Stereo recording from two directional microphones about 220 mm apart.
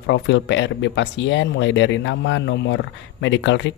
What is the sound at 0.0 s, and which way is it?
Speech, 55° left (ahead or behind).